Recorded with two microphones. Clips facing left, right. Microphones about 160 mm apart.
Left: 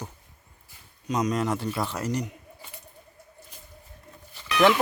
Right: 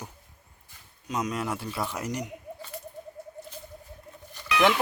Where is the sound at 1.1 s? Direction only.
5° right (ahead or behind).